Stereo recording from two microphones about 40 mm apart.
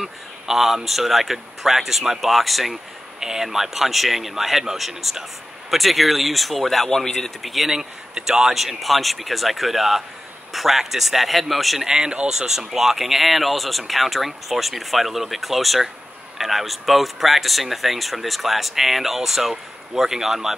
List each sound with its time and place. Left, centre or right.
0.0 s speech: centre
3.2 s speech: centre
7.4 s speech: centre
7.7 s speech: centre
11.8 s speech: centre
12.4 s speech: centre